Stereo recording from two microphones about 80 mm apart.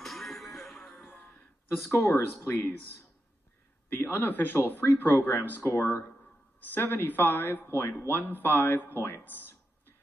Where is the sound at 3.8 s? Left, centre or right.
Left.